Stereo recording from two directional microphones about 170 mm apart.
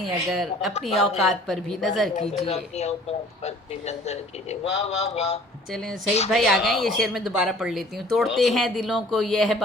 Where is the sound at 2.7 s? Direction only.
40° left (ahead or behind).